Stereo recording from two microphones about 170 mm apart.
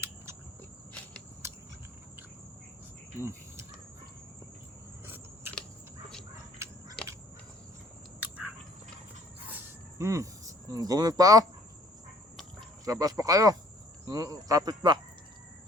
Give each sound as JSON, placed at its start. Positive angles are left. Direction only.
{"t": 1.4, "sound": "vehicle", "side_deg": -15}
{"t": 3.2, "sound": "cricket", "side_deg": -15}
{"t": 5.0, "sound": "scissors", "side_deg": -15}
{"t": 8.2, "sound": "a sound", "side_deg": -10}
{"t": 12.8, "sound": "speech", "side_deg": -20}